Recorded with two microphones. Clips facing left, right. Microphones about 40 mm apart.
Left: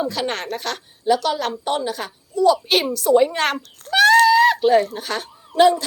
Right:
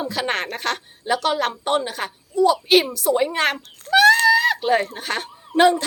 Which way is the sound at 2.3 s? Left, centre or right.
Centre.